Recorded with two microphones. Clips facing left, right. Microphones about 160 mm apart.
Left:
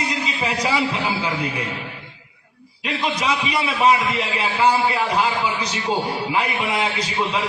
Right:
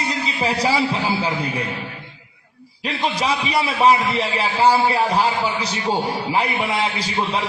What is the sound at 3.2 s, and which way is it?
A man's voice, 35° right (ahead or behind).